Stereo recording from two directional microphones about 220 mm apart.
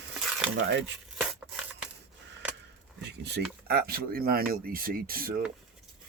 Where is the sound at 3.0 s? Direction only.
50° right (ahead or behind).